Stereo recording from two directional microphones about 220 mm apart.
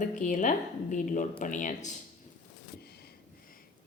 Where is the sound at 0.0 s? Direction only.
35° left (ahead or behind).